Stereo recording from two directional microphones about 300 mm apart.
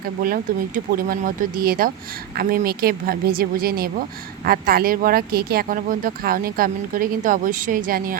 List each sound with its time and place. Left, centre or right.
0.2 s speech: right